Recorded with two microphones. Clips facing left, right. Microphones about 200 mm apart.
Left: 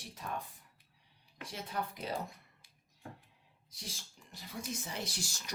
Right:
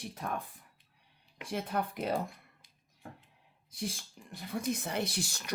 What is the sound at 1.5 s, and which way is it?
Speech, 55° right (ahead or behind).